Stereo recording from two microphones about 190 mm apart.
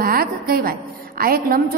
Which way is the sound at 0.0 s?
50° right (ahead or behind).